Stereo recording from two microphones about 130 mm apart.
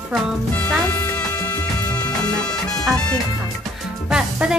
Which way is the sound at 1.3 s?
30° left (ahead or behind).